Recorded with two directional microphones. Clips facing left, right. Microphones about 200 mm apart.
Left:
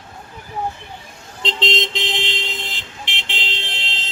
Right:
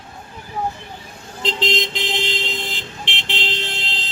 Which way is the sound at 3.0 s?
35° right (ahead or behind).